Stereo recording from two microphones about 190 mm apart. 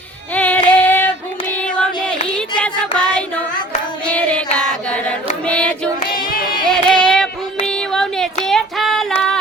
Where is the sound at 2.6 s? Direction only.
5° left (ahead or behind).